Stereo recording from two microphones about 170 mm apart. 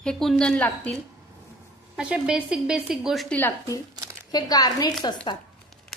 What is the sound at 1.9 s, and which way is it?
A woman's voice, 5° right (ahead or behind).